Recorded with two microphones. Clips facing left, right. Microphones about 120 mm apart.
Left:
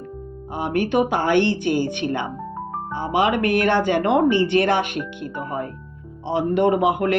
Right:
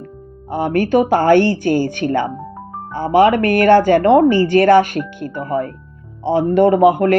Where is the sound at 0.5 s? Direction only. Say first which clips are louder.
Right 6 dB; 45° right (ahead or behind).